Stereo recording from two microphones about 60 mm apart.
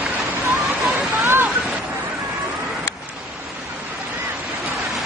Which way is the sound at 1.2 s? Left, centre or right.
Right.